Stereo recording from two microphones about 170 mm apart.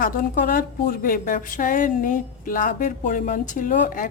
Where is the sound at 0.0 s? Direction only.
55° left (ahead or behind).